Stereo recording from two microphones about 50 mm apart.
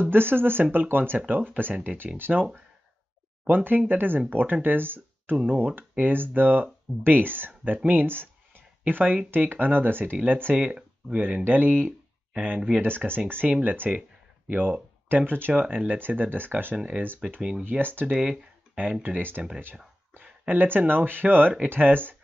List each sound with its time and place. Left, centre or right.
0.0 s speech: right
3.4 s speech: right
8.1 s a sound: right
9.3 s speech: right
10.5 s speech: right
12.8 s speech: right
13.5 s speech: right
15.7 s speech: right
16.7 s speech: right
17.6 s speech: right
18.0 s speech: centre
20.4 s speech: right